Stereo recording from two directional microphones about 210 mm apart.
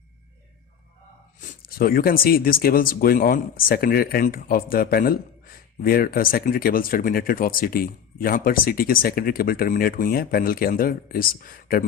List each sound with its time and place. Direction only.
1.4 s speech: 45° left (ahead or behind)